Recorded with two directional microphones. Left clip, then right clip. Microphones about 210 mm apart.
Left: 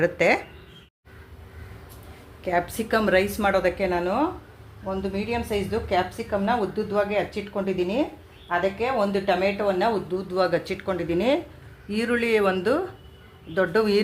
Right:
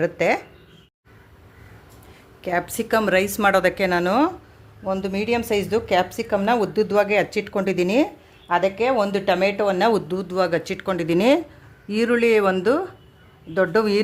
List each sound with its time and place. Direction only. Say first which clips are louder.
0.0 s speech: even; 10° right (ahead or behind)
2.4 s a woman's voice: right 1 dB; 25° right (ahead or behind); by 10.2 s 55° right (ahead or behind)
10.2 s speech: right 2 dB; 30° right (ahead or behind)
11.9 s speech: right 5 dB; 30° right (ahead or behind)